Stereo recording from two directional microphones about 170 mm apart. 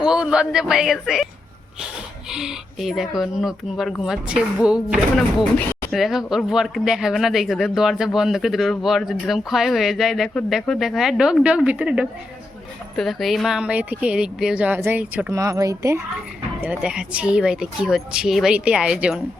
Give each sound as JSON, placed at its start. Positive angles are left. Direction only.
{"t": 0.0, "sound": "speech", "side_deg": -5}
{"t": 2.3, "sound": "speech", "side_deg": -5}
{"t": 5.4, "sound": "speech", "side_deg": 10}
{"t": 15.3, "sound": "speech", "side_deg": -20}
{"t": 16.6, "sound": "speech", "side_deg": -5}